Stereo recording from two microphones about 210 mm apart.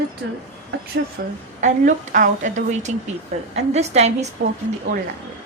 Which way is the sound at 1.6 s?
40° right (ahead or behind).